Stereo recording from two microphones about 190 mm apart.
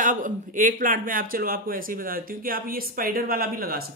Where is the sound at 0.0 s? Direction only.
45° right (ahead or behind).